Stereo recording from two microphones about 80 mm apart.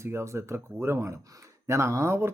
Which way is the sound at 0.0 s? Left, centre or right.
Right.